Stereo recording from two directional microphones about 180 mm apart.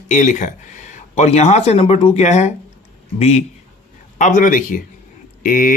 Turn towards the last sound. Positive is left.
turn(degrees=50)  # may be behind; listen again after turning